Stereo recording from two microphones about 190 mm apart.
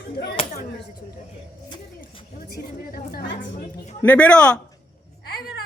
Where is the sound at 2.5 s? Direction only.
55° left (ahead or behind).